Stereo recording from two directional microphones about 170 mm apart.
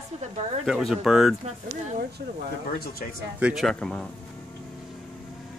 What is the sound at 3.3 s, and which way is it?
Speech, 5° right (ahead or behind).